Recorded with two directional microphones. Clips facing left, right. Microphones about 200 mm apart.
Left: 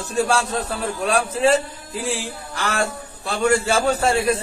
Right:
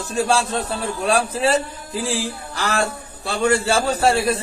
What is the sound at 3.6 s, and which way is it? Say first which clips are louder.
Speech: right 1 dB; 35° right (ahead or behind).